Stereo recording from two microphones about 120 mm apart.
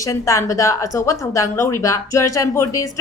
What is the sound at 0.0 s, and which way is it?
A woman's voice, 25° left (ahead or behind).